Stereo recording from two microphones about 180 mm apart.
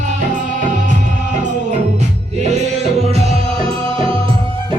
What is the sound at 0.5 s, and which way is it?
Music, 45° right (ahead or behind).